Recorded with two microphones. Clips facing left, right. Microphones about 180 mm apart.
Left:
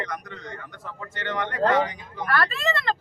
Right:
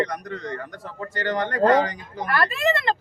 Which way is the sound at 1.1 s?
35° right (ahead or behind).